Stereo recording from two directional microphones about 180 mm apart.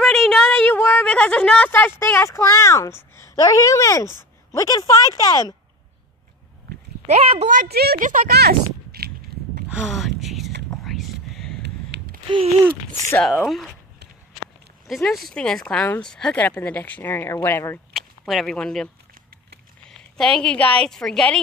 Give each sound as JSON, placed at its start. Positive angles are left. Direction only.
{"t": 0.0, "sound": "a woman's voice", "side_deg": 0}
{"t": 7.1, "sound": "speech", "side_deg": -35}
{"t": 9.7, "sound": "a sound", "side_deg": -5}
{"t": 11.6, "sound": "a sound", "side_deg": -70}
{"t": 12.3, "sound": "speech", "side_deg": -30}
{"t": 13.2, "sound": "speech", "side_deg": 0}
{"t": 14.9, "sound": "speech", "side_deg": 0}
{"t": 17.9, "sound": "speech", "side_deg": 0}
{"t": 19.9, "sound": "a woman's voice", "side_deg": 5}